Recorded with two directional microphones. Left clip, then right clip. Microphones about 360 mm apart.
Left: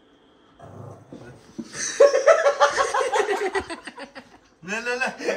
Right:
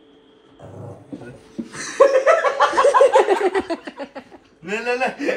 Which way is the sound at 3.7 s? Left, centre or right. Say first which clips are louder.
Right 7 dB; centre.